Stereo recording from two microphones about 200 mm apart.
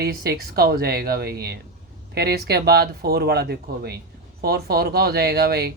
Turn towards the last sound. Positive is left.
turn(degrees=-50)  # may be behind; listen again after turning